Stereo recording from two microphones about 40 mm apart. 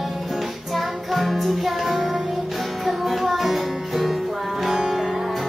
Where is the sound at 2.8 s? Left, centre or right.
Centre.